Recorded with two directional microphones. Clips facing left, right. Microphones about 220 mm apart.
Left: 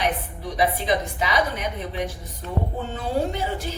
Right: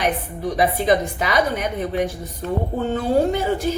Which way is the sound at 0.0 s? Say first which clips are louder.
Right 4 dB; 45° right (ahead or behind).